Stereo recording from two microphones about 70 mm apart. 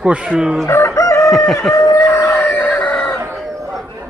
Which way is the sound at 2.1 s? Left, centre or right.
Left.